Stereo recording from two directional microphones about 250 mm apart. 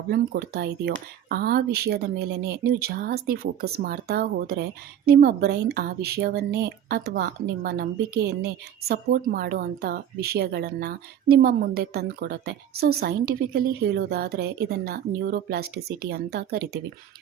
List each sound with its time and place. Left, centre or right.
0.1 s speech: right